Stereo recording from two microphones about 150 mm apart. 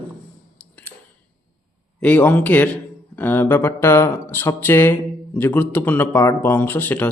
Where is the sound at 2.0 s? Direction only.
10° left (ahead or behind).